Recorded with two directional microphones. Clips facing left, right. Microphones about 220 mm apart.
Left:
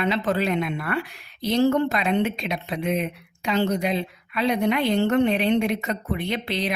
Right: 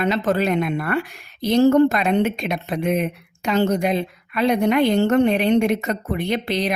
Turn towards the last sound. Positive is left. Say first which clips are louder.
# right 4 dB
turn(degrees=-45)  # may be behind; listen again after turning